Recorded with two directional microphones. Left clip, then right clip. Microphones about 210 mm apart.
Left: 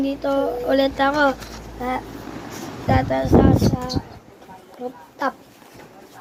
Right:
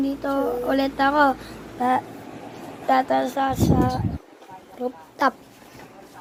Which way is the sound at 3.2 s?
30° right (ahead or behind).